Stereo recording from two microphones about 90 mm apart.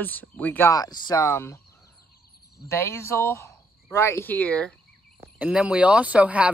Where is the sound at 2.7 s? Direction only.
30° left (ahead or behind).